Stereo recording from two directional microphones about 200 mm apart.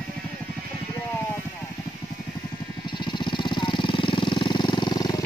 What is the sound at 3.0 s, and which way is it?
Jackhammer, 25° left (ahead or behind).